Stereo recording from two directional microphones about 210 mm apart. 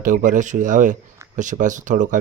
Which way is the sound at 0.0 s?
40° right (ahead or behind).